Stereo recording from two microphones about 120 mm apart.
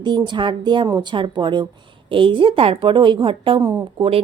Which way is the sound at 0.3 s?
40° right (ahead or behind).